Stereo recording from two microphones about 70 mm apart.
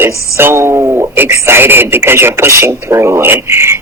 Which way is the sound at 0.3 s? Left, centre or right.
Right.